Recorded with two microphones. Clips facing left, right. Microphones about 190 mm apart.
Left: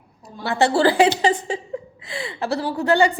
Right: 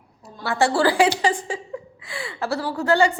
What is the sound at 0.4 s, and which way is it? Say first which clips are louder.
A woman's voice: left 2 dB; 20° left (ahead or behind).